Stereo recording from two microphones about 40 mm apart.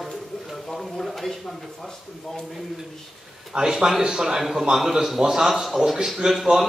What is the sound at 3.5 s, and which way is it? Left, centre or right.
Speech, centre.